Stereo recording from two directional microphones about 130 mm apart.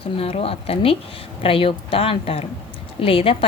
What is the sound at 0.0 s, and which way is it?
Speech, 50° left (ahead or behind).